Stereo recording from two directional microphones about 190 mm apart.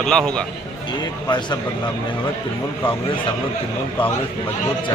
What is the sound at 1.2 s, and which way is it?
Speech, 25° left (ahead or behind).